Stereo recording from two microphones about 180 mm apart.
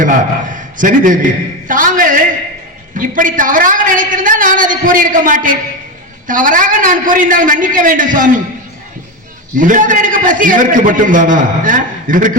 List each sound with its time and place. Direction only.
0.0 s a man's voice: 45° right (ahead or behind)
9.6 s a man's voice: 45° right (ahead or behind)